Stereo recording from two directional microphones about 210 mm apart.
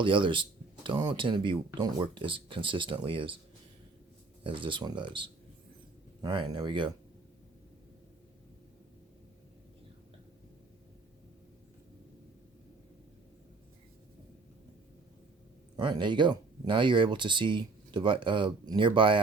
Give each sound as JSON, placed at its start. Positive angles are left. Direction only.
{"t": 0.0, "sound": "speech", "side_deg": -25}
{"t": 4.4, "sound": "speech", "side_deg": -25}
{"t": 15.7, "sound": "speech", "side_deg": -20}